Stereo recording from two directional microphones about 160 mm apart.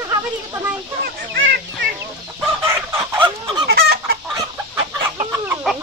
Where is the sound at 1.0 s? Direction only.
90° right.